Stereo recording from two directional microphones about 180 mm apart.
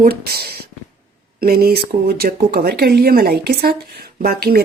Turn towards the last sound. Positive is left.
turn(degrees=-55)  # may be behind; listen again after turning